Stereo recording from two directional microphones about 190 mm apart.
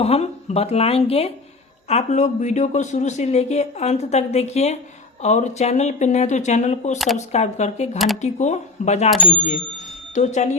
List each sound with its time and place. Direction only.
0.0 s speech: 35° left (ahead or behind)
7.9 s speech: centre (ahead or behind)
8.2 s speech: 40° left (ahead or behind)
10.2 s speech: 35° left (ahead or behind)